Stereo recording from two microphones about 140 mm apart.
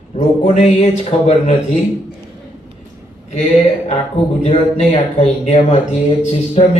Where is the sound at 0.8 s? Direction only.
50° left (ahead or behind).